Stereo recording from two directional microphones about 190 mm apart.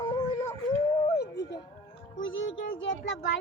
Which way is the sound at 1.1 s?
60° left (ahead or behind).